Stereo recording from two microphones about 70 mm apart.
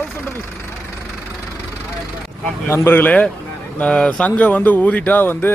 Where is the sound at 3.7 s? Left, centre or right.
Centre.